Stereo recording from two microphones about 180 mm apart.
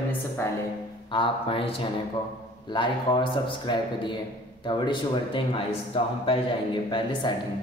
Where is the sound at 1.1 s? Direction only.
30° left (ahead or behind).